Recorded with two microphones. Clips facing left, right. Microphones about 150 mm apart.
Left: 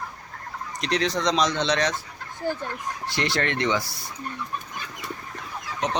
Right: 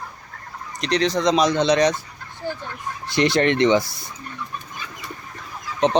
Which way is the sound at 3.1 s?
20° right (ahead or behind).